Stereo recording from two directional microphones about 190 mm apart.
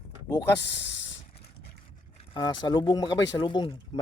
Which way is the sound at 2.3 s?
20° left (ahead or behind).